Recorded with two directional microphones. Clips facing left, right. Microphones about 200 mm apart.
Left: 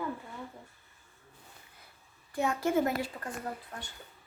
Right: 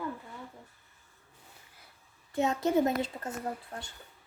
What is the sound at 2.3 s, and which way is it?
Speech, 20° right (ahead or behind).